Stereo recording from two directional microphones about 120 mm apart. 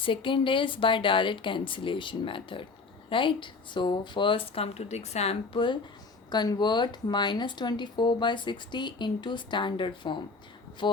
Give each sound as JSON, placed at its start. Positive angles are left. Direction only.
{"t": 0.0, "sound": "speech", "side_deg": 45}
{"t": 6.3, "sound": "speech", "side_deg": 35}